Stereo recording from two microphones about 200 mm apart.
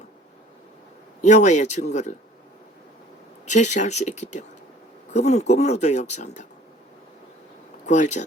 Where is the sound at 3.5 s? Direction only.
35° left (ahead or behind).